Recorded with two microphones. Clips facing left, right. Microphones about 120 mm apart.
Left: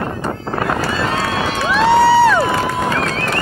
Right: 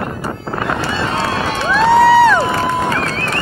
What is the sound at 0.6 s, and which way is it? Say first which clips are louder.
Run: even; 25° right (ahead or behind).